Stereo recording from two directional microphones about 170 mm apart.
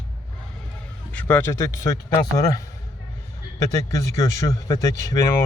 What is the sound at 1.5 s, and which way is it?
A man's voice, 20° left (ahead or behind).